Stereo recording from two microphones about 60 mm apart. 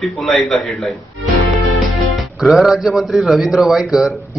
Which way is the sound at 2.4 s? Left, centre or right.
Centre.